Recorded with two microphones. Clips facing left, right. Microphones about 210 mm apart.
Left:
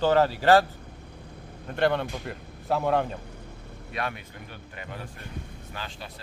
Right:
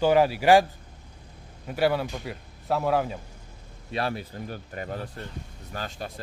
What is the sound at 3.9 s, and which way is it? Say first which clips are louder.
A man's voice: right 4 dB; 30° right (ahead or behind).